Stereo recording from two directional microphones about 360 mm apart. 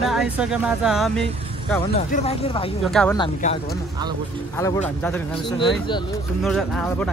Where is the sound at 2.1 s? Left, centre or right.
Centre.